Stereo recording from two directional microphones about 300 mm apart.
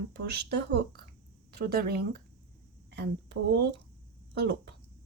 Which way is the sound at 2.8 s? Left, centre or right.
Right.